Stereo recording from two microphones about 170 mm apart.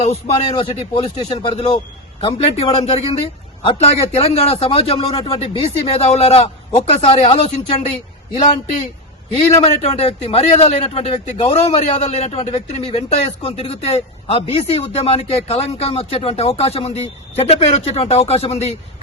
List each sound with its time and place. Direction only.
0.1 s a man's voice: 30° left (ahead or behind)
9.3 s a man's voice: 40° left (ahead or behind)